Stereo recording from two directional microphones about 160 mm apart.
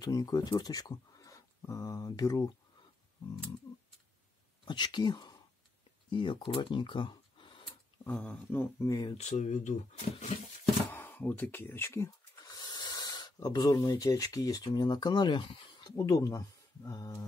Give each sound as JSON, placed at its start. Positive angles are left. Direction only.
{"t": 0.0, "sound": "speech", "side_deg": 25}
{"t": 4.6, "sound": "speech", "side_deg": 30}
{"t": 8.0, "sound": "speech", "side_deg": 10}
{"t": 9.1, "sound": "speech", "side_deg": 45}
{"t": 10.9, "sound": "speech", "side_deg": 10}